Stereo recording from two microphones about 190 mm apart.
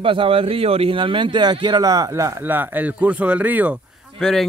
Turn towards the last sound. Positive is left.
turn(degrees=0)  # may be behind; listen again after turning